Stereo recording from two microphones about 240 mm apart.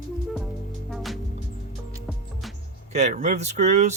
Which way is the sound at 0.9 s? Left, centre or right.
Centre.